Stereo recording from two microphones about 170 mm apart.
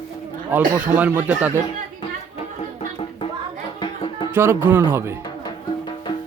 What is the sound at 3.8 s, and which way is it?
Music, 30° left (ahead or behind).